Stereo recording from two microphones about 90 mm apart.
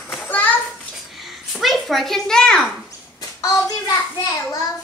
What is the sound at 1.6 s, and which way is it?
A child's voice, centre (ahead or behind).